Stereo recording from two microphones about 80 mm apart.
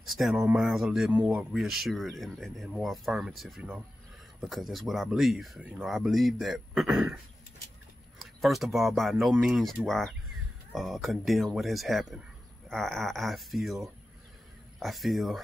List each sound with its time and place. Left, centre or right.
0.1 s speech: centre
5.6 s speech: centre
5.9 s speech: centre
8.2 s speech: centre
14.8 s speech: centre